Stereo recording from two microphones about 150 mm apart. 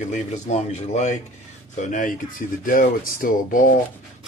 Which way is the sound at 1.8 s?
60° left (ahead or behind).